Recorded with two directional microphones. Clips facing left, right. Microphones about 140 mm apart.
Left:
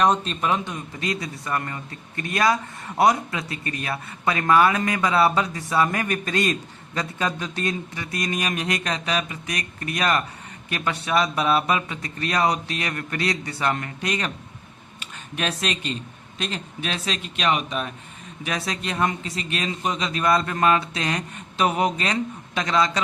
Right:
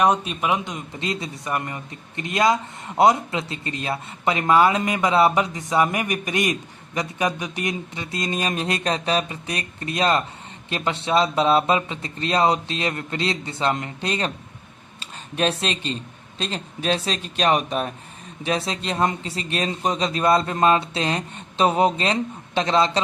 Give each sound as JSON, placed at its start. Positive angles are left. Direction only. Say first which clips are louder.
{"t": 0.0, "sound": "a man's voice", "louder": "right 1 dB", "side_deg": -10}
{"t": 18.4, "sound": "a man's voice", "louder": "right 4 dB", "side_deg": -25}